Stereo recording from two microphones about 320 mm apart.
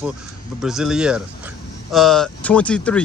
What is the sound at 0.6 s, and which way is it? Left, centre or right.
Speech, centre.